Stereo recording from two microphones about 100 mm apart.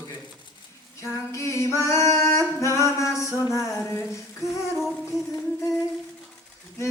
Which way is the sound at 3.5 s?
30° left (ahead or behind).